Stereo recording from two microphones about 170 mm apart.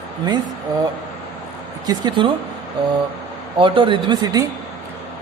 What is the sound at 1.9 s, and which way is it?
Speech, 25° right (ahead or behind).